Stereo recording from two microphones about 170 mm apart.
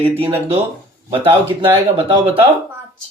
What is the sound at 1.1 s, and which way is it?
Speech, 30° right (ahead or behind).